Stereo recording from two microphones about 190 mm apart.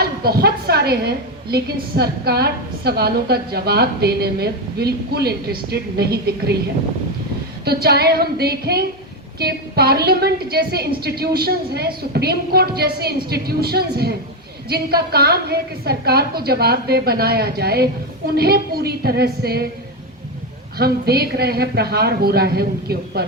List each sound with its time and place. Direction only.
0.0 s a woman's voice: 55° right (ahead or behind)
7.6 s a woman's voice: 55° right (ahead or behind)
20.7 s a woman's voice: 55° right (ahead or behind)